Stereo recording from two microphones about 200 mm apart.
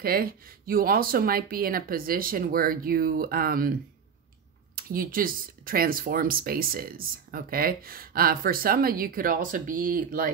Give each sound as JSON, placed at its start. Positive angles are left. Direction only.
{"t": 0.0, "sound": "speech", "side_deg": -45}
{"t": 4.7, "sound": "speech", "side_deg": -45}